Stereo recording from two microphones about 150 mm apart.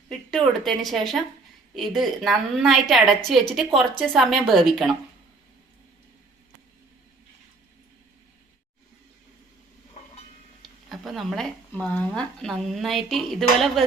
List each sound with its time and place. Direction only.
0.1 s a woman's voice: centre (ahead or behind)
10.0 s a sound: 50° left (ahead or behind)
10.6 s speech: centre (ahead or behind)